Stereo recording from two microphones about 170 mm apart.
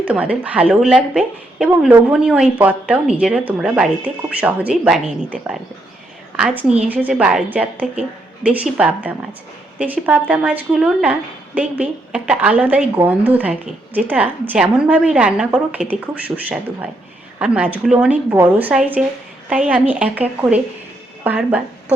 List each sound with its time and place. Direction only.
0.0 s speech: 10° right (ahead or behind)
17.4 s speech: 5° right (ahead or behind)